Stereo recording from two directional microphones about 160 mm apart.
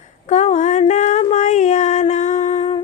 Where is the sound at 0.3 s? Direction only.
50° left (ahead or behind).